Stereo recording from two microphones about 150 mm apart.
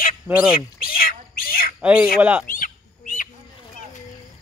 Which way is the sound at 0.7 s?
75° left (ahead or behind).